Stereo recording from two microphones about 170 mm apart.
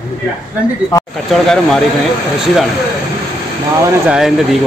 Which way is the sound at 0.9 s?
20° left (ahead or behind).